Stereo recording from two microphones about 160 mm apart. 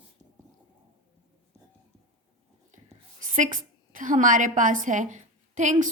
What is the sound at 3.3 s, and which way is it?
A woman's voice, 55° right (ahead or behind).